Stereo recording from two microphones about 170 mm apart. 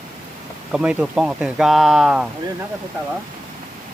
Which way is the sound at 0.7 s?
5° right (ahead or behind).